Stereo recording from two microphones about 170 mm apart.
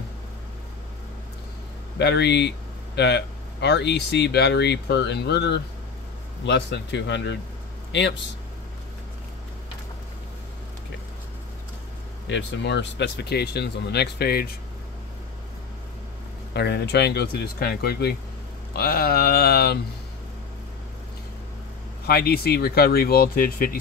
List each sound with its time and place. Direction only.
2.0 s a man's voice: 85° left
12.3 s speech: 90° left; by 14.5 s 65° left (ahead or behind)
16.5 s speech: 75° left (ahead or behind)
22.0 s speech: 70° left (ahead or behind)